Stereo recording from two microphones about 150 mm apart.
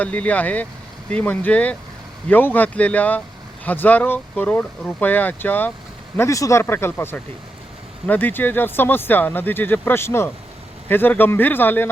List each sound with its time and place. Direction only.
0.0 s speech: 10° left (ahead or behind)